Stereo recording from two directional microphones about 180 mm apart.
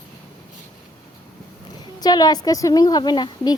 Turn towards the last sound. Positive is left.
turn(degrees=25)  # may be behind; listen again after turning